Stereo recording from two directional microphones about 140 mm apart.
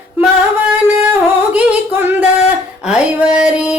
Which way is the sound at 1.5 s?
10° right (ahead or behind).